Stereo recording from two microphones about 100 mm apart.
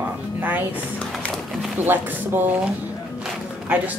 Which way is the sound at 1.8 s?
20° right (ahead or behind).